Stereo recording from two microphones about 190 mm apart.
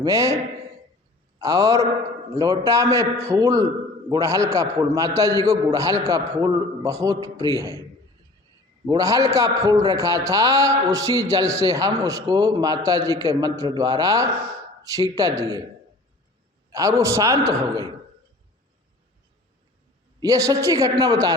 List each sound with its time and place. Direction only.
0.0 s a man's voice: 15° right (ahead or behind)
1.4 s a man's voice: 15° right (ahead or behind)
8.9 s a man's voice: 15° right (ahead or behind)
16.6 s a man's voice: 15° right (ahead or behind)
20.1 s a woman's voice: 20° right (ahead or behind)